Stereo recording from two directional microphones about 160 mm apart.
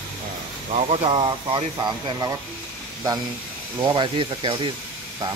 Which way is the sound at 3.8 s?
30° right (ahead or behind).